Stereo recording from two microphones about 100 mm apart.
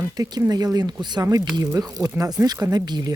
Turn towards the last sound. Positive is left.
turn(degrees=-40)  # may be behind; listen again after turning